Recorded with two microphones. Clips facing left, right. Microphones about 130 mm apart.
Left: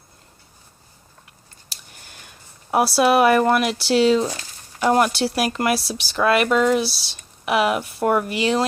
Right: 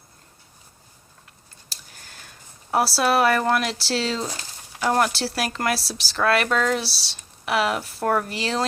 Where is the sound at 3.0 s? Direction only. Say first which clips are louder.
Left 6 dB; 15° left (ahead or behind).